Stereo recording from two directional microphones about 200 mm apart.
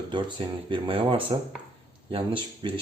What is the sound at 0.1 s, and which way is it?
Speech, 25° right (ahead or behind).